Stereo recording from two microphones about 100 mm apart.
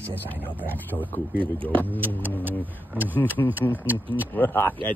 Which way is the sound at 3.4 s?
35° left (ahead or behind).